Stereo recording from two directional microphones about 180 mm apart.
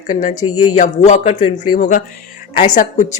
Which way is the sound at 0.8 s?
40° left (ahead or behind).